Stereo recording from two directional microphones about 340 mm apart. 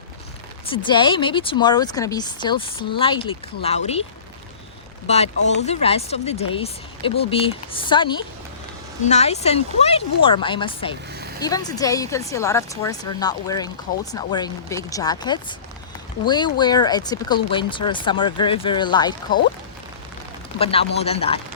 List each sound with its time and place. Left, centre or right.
0.7 s speech: centre
5.0 s speech: centre
20.6 s speech: centre